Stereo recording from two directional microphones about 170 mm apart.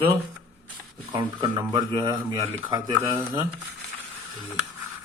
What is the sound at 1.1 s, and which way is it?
Speech, 25° right (ahead or behind).